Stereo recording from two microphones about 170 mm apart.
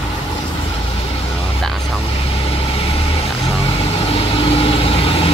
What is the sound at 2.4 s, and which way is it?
Vehicle, 35° left (ahead or behind).